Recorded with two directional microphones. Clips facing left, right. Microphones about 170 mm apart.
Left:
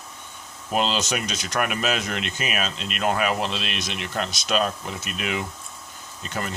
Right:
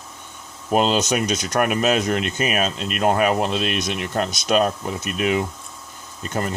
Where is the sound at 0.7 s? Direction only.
45° right (ahead or behind).